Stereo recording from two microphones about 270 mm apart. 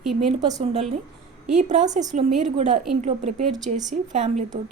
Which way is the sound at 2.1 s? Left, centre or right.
Right.